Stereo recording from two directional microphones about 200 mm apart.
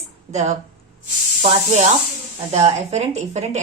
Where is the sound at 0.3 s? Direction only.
35° right (ahead or behind).